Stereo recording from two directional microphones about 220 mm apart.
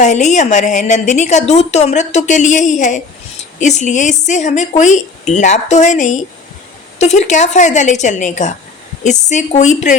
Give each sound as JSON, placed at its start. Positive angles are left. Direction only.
{"t": 0.0, "sound": "a woman's voice", "side_deg": 30}